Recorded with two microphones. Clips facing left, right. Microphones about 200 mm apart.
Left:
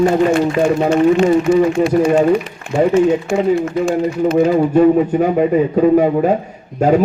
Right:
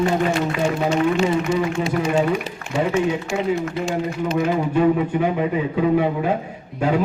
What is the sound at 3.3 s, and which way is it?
Speech, 55° left (ahead or behind).